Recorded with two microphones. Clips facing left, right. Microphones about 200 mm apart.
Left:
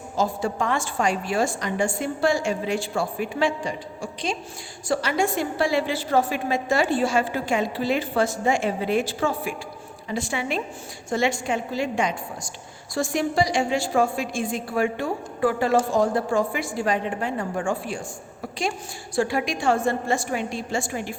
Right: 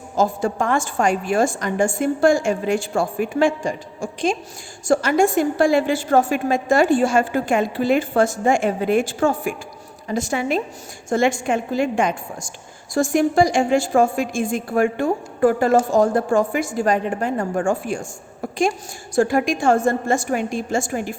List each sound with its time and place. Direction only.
0.2 s a woman's voice: 50° right (ahead or behind)
19.1 s a woman's voice: 45° right (ahead or behind)